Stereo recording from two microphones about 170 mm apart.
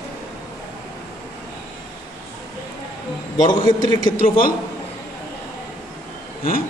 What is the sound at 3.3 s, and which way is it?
Speech, 25° left (ahead or behind).